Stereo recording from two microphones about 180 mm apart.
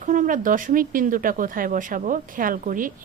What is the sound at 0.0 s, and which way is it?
Speech, 45° right (ahead or behind).